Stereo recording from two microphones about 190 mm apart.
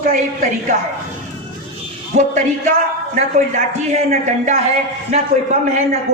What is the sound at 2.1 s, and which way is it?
Speech, 35° right (ahead or behind).